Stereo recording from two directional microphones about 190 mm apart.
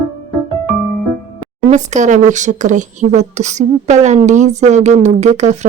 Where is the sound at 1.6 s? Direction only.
40° right (ahead or behind).